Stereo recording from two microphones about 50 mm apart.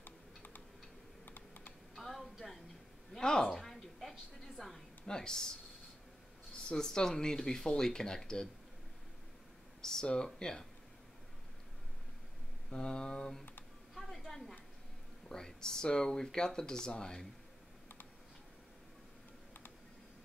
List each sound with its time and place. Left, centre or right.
0.0 s typing: left
1.2 s computer keyboard: left
2.0 s a sound: centre
3.1 s speech: centre
3.5 s a sound: centre
5.0 s speech: centre
6.7 s speech: centre
9.8 s speech: centre
12.6 s speech: centre
13.9 s a sound: centre
15.2 s speech: centre